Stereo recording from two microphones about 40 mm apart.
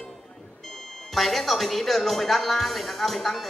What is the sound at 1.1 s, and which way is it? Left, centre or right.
Speech, centre.